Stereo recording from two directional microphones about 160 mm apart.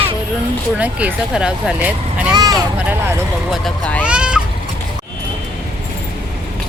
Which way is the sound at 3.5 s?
5° left (ahead or behind).